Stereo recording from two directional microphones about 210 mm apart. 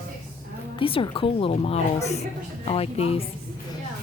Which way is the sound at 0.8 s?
25° left (ahead or behind).